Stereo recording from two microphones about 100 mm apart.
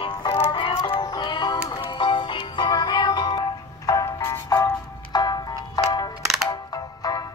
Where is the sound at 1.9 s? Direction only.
55° left (ahead or behind).